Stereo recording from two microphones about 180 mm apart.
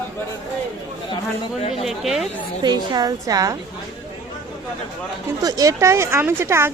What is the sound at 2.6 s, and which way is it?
A woman's voice, 25° right (ahead or behind).